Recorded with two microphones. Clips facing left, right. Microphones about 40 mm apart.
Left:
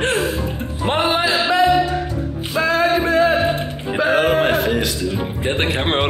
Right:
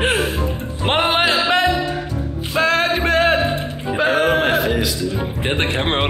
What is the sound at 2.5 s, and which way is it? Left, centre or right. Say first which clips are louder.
Music: even; right.